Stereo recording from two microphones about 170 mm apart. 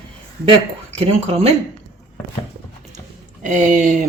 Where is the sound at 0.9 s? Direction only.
35° right (ahead or behind).